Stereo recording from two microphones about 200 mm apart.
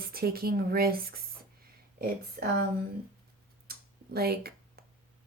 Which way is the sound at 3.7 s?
50° right (ahead or behind).